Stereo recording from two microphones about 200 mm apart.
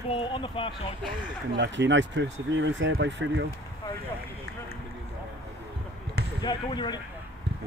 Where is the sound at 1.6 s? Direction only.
65° right (ahead or behind).